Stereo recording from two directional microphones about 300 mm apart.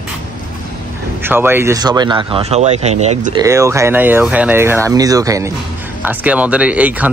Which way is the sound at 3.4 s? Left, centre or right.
Centre.